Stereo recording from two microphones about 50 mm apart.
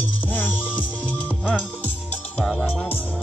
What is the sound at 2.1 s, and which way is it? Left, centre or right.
Speech, left.